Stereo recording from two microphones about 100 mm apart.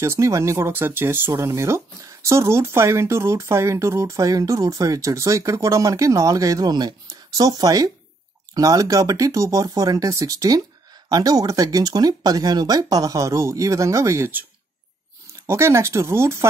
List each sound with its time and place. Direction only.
0.0 s speech: 30° right (ahead or behind)
15.4 s speech: 30° right (ahead or behind)